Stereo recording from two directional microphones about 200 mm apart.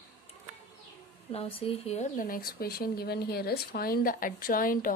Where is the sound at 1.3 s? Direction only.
30° left (ahead or behind).